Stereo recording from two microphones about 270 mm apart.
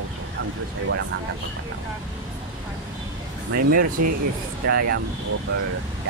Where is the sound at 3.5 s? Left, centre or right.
Right.